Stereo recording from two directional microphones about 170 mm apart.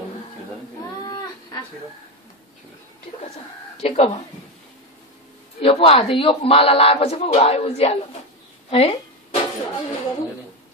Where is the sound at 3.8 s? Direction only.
35° left (ahead or behind).